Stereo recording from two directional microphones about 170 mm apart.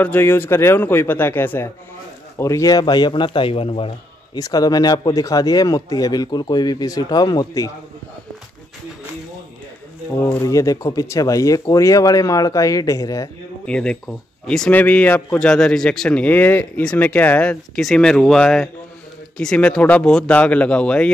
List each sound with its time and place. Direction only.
0.0 s speech: 10° left (ahead or behind); by 3.9 s 35° left (ahead or behind)
4.4 s speech: 20° left (ahead or behind)
10.2 s speech: 20° left (ahead or behind)
13.7 s a man's voice: 5° left (ahead or behind)